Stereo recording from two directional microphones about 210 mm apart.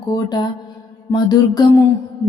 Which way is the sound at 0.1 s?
20° left (ahead or behind).